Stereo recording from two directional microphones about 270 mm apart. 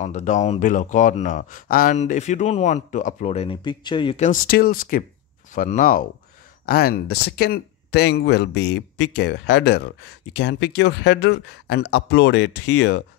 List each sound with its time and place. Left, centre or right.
0.0 s speech: left